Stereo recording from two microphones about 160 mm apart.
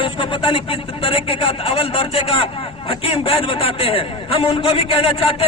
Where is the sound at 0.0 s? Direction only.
35° left (ahead or behind).